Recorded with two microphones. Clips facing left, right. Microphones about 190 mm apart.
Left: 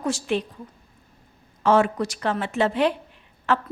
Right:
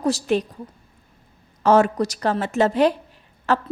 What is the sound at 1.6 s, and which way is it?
A woman's voice, 40° right (ahead or behind).